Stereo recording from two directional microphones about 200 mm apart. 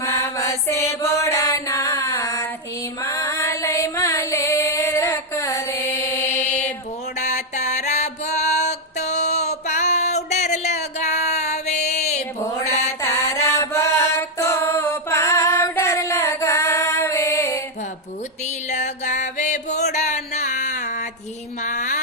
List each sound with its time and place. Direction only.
0.0 s mantra: 15° left (ahead or behind)
1.0 s a sound: 15° left (ahead or behind)
3.0 s music: 15° left (ahead or behind)
6.4 s mantra: 35° left (ahead or behind)
7.2 s music: 35° left (ahead or behind)
12.7 s mantra: 15° left (ahead or behind)
18.7 s music: 35° left (ahead or behind)
21.6 s a sound: 35° left (ahead or behind)